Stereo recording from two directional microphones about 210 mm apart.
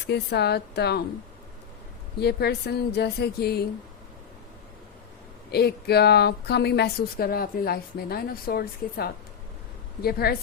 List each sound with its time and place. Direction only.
0.0 s a woman's voice: 50° left (ahead or behind)
2.1 s a woman's voice: 50° left (ahead or behind)
5.5 s a woman's voice: 50° left (ahead or behind)